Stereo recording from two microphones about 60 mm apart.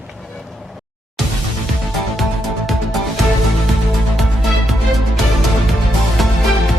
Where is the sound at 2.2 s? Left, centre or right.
Centre.